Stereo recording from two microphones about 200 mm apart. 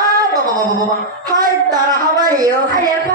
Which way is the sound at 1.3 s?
20° right (ahead or behind).